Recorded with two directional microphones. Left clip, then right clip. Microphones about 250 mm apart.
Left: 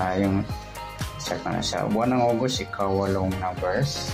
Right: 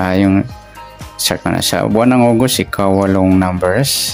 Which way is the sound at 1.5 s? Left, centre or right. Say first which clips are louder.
Right 10 dB; right.